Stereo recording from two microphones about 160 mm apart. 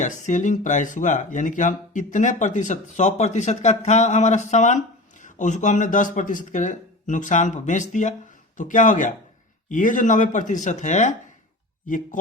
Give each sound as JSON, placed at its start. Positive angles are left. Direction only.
{"t": 0.0, "sound": "speech", "side_deg": 50}